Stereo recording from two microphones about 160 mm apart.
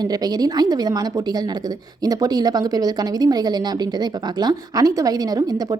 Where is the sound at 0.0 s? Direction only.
25° right (ahead or behind).